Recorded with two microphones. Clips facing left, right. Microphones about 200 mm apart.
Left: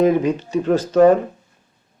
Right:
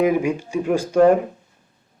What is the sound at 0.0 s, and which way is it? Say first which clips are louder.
Speech: left 3 dB; 10° right (ahead or behind).